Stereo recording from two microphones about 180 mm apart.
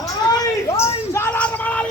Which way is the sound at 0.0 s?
20° left (ahead or behind).